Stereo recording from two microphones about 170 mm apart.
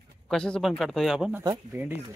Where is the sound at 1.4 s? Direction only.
15° right (ahead or behind).